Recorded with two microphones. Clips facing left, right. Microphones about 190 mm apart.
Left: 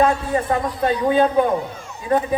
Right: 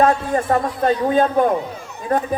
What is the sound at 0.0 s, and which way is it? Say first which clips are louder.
A man's voice: right 1 dB; 45° right (ahead or behind).